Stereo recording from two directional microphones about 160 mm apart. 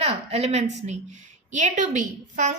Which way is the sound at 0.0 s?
40° right (ahead or behind).